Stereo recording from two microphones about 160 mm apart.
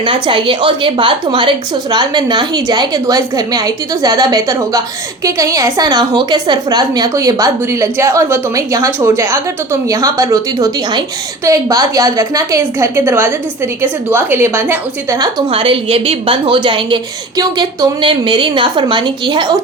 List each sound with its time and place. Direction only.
0.0 s a woman's voice: 30° right (ahead or behind)